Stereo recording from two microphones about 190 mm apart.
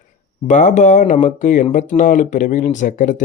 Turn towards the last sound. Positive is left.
turn(degrees=45)  # may be behind; listen again after turning